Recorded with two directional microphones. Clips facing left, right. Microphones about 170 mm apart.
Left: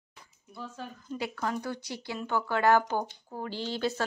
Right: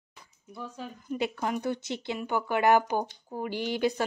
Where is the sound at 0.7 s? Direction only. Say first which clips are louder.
Right 4 dB; 15° right (ahead or behind).